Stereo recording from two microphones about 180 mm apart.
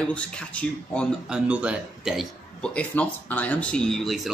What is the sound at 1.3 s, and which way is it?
A man's voice, 5° right (ahead or behind).